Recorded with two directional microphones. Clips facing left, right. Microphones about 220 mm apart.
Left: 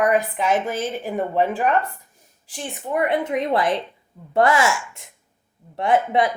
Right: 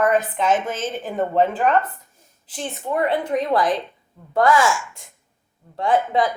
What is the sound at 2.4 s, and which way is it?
A woman's voice, 15° left (ahead or behind).